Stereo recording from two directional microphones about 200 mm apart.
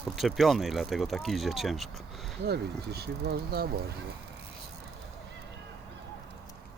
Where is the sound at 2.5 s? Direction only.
55° right (ahead or behind).